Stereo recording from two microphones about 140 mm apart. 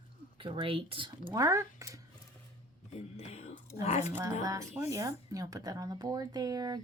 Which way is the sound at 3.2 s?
50° left (ahead or behind).